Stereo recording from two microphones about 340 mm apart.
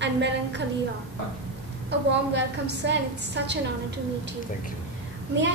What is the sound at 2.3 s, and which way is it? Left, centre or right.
A woman's voice, right.